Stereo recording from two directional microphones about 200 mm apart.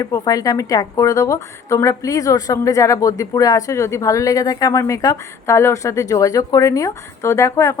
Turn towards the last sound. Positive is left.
turn(degrees=15)  # may be behind; listen again after turning